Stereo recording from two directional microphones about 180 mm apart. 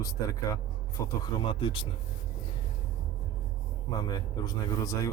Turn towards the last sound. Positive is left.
turn(degrees=20)  # may be behind; listen again after turning